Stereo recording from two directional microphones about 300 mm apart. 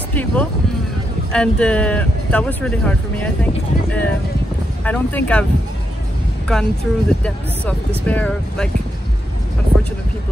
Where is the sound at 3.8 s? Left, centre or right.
Centre.